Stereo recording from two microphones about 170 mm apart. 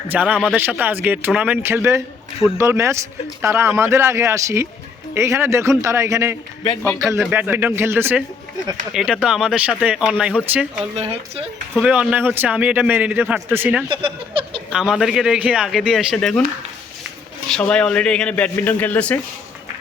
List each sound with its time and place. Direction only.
0.1 s a man's voice: 10° right (ahead or behind)
10.9 s speech: 35° right (ahead or behind)
11.7 s a man's voice: 5° right (ahead or behind)
13.9 s speech: 30° right (ahead or behind)
14.7 s speech: 5° right (ahead or behind)
17.5 s a man's voice: 5° left (ahead or behind)